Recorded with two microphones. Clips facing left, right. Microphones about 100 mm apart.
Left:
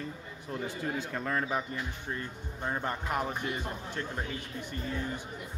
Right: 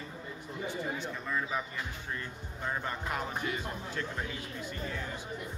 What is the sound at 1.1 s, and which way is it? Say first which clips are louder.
Speech: left 3 dB; 75° left (ahead or behind).